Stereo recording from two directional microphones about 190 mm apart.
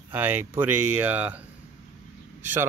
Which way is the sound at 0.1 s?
10° right (ahead or behind).